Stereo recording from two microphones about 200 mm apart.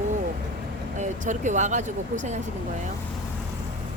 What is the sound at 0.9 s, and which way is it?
Speech, 40° right (ahead or behind).